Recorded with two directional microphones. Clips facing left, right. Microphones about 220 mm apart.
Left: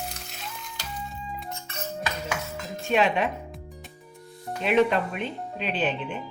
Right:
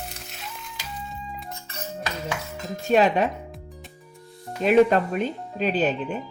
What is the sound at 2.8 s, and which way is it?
Speech, 40° right (ahead or behind).